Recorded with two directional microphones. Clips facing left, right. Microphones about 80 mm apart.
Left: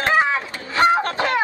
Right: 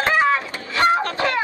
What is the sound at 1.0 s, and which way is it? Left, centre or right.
Goose, left.